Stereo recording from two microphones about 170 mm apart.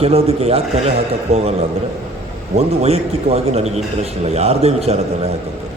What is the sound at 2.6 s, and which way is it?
A man's voice, 35° right (ahead or behind).